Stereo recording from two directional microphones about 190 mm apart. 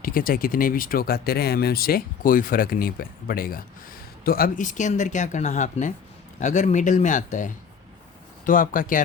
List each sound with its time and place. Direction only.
0.0 s speech: 50° left (ahead or behind)